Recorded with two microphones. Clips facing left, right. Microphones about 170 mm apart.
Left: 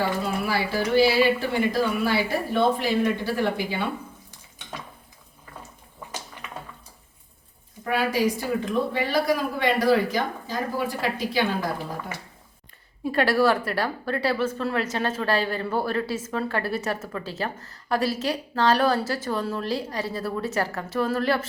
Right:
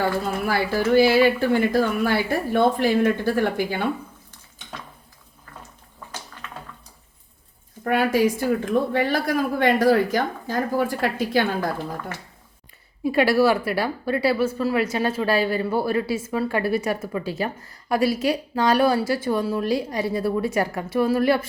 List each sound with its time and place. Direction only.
0.4 s speech: 50° right (ahead or behind)
6.4 s a sound: 15° left (ahead or behind)
7.9 s speech: 50° right (ahead or behind)
12.1 s speech: 10° left (ahead or behind)
13.1 s a woman's voice: 10° right (ahead or behind)